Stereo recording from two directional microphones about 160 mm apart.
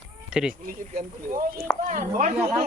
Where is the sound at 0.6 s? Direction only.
60° right (ahead or behind).